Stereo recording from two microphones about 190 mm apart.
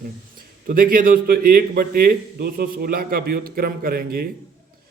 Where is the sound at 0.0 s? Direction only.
50° right (ahead or behind).